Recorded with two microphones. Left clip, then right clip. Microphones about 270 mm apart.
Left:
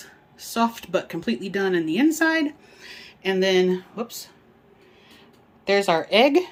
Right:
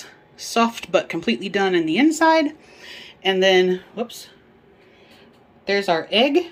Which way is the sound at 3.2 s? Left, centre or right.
Centre.